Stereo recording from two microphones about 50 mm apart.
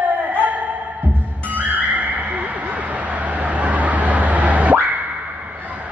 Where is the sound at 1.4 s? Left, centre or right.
Right.